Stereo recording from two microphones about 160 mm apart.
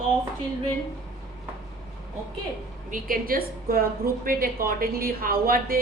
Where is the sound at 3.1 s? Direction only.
65° right (ahead or behind).